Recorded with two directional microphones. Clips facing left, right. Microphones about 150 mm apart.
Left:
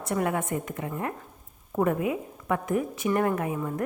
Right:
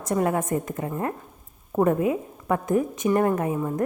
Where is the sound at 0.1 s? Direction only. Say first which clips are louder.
Right 4 dB; 35° right (ahead or behind).